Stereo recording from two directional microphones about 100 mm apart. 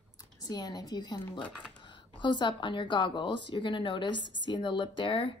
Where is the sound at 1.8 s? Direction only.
55° left (ahead or behind).